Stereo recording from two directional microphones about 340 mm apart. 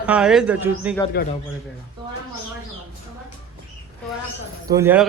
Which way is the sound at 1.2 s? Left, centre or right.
Left.